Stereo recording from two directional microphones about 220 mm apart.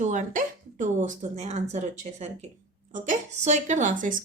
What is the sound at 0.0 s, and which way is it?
A woman's voice, 35° right (ahead or behind).